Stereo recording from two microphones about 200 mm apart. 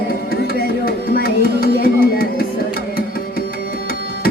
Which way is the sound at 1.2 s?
50° left (ahead or behind).